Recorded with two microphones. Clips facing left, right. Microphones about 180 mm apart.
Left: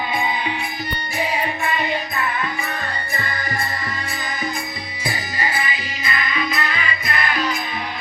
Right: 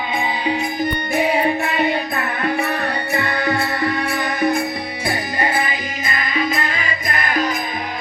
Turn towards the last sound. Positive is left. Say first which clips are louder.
# right 2 dB
turn(degrees=-50)  # may be behind; listen again after turning